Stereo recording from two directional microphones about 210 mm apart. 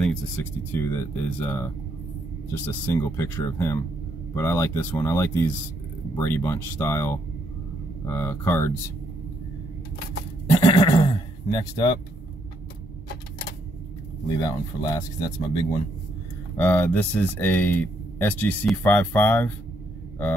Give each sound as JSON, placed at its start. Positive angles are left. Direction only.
{"t": 0.0, "sound": "speech", "side_deg": 10}
{"t": 10.5, "sound": "neigh", "side_deg": 20}
{"t": 11.5, "sound": "speech", "side_deg": 25}
{"t": 14.3, "sound": "speech", "side_deg": 15}
{"t": 16.5, "sound": "speech", "side_deg": 10}